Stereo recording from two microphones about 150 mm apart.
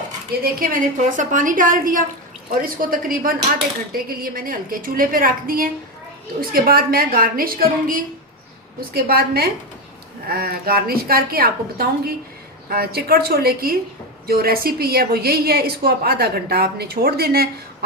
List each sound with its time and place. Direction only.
0.4 s a woman's voice: 70° right (ahead or behind)
8.8 s a woman's voice: 90° right